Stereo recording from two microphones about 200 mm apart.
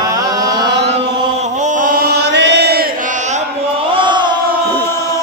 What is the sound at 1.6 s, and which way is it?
Chant, 40° right (ahead or behind).